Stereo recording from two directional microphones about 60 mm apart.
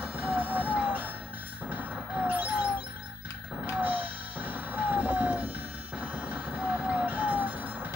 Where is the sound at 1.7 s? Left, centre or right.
Right.